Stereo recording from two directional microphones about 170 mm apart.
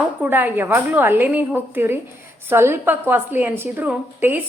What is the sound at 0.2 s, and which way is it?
A woman's voice, 10° right (ahead or behind).